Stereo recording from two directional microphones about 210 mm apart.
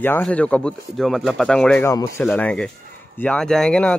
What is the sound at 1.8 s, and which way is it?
A man's voice, 15° left (ahead or behind).